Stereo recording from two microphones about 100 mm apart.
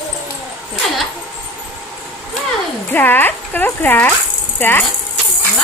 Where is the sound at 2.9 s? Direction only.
20° left (ahead or behind).